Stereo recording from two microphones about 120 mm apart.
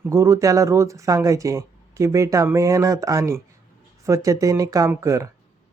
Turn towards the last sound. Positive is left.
turn(degrees=-25)  # may be behind; listen again after turning